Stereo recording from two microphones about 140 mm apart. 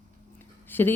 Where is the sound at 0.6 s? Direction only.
15° left (ahead or behind).